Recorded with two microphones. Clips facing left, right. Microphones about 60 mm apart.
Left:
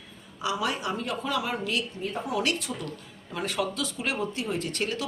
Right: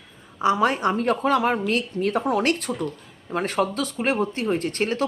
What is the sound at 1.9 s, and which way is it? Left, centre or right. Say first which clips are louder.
Speech: right 10 dB; right.